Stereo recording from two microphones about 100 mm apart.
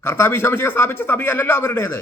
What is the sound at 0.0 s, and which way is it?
Speech, 25° left (ahead or behind).